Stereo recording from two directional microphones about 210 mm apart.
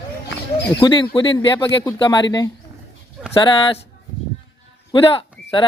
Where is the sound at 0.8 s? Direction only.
20° left (ahead or behind).